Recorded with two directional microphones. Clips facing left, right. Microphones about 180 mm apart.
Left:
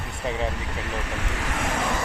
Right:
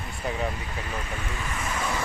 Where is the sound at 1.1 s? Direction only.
80° left.